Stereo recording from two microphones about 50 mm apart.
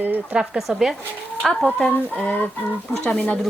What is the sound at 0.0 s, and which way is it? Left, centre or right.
Speech, right.